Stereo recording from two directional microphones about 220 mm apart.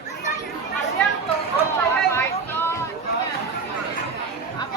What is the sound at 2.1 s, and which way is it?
Chatter, 10° left (ahead or behind).